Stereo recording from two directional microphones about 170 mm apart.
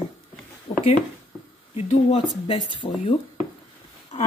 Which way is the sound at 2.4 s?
30° left (ahead or behind).